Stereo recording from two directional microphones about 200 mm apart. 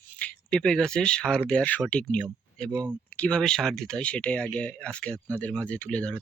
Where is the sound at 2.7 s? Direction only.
20° right (ahead or behind).